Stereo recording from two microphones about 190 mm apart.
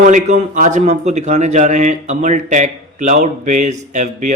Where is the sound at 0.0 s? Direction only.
40° right (ahead or behind).